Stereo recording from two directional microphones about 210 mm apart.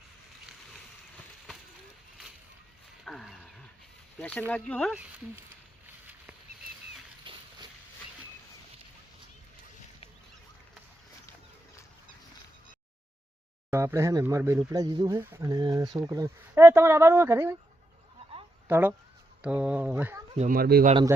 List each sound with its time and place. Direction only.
3.0 s roaring cats: centre (ahead or behind)
4.2 s speech: 10° left (ahead or behind)
7.3 s a sound: 25° right (ahead or behind)
13.7 s speech: 15° right (ahead or behind)
18.7 s speech: 10° right (ahead or behind)
20.3 s speech: 35° right (ahead or behind)